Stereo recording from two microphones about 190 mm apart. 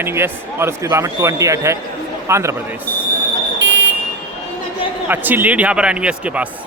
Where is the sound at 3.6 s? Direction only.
70° right (ahead or behind).